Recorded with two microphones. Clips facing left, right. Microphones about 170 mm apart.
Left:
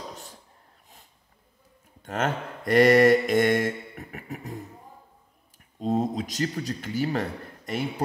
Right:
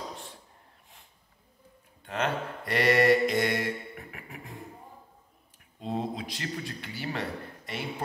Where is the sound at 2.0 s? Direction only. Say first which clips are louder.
Left 2 dB; 45° left (ahead or behind).